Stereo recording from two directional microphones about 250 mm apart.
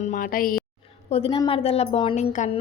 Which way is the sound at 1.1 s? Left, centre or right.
Left.